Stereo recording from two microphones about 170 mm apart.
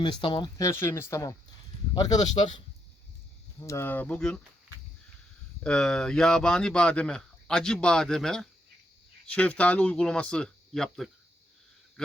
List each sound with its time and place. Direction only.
0.0 s speech: 30° left (ahead or behind)
3.6 s speech: 15° left (ahead or behind)
5.6 s speech: 5° left (ahead or behind)
12.0 s a sound: 5° left (ahead or behind)